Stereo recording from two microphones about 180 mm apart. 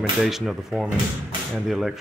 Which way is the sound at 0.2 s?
Centre (ahead or behind).